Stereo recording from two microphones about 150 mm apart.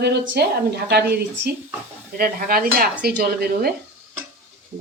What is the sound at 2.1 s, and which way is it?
Dishes, 75° right (ahead or behind).